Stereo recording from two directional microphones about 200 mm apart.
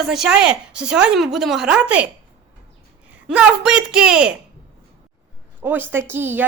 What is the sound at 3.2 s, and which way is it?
A woman's voice, 5° right (ahead or behind).